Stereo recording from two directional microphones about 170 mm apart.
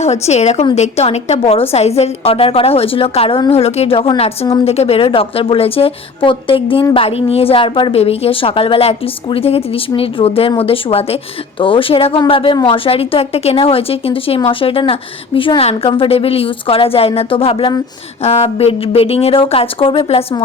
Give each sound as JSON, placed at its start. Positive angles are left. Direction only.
{"t": 0.0, "sound": "a woman's voice", "side_deg": 40}